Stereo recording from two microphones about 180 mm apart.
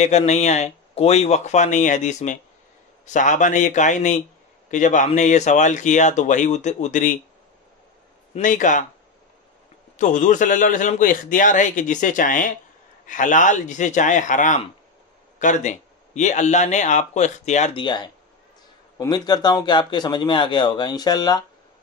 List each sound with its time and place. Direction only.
0.0 s a man's voice: 35° left (ahead or behind)
8.4 s a man's voice: 45° left (ahead or behind)
9.9 s a man's voice: 45° left (ahead or behind)
17.7 s speech: 25° left (ahead or behind)